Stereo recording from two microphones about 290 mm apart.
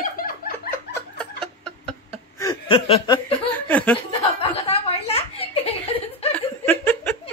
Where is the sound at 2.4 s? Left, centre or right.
Centre.